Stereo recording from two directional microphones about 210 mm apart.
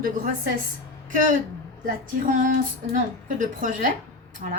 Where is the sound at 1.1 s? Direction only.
40° right (ahead or behind).